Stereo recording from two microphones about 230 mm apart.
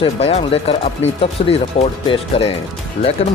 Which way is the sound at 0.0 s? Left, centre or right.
Left.